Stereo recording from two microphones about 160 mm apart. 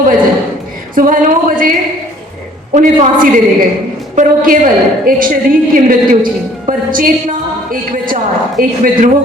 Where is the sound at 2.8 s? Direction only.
50° right (ahead or behind).